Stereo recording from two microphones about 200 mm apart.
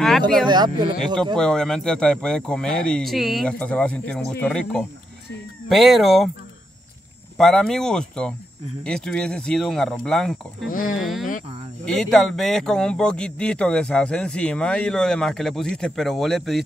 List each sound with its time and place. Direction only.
0.5 s speech: 20° right (ahead or behind)
1.3 s speech: 5° left (ahead or behind)
7.3 s speech: centre (ahead or behind)
10.7 s speech: 40° left (ahead or behind)
11.0 s speech: centre (ahead or behind)